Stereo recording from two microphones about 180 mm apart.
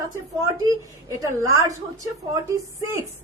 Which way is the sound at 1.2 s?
15° right (ahead or behind).